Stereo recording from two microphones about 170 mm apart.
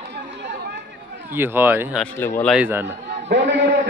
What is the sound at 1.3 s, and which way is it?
Speech, 10° right (ahead or behind).